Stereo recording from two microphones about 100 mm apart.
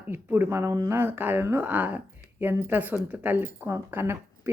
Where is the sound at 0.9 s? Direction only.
20° right (ahead or behind).